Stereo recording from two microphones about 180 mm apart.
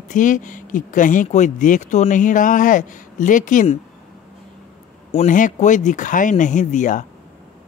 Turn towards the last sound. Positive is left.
turn(degrees=45)  # may be behind; listen again after turning